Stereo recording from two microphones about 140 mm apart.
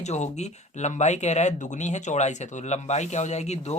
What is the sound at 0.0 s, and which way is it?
Speech, 55° left (ahead or behind).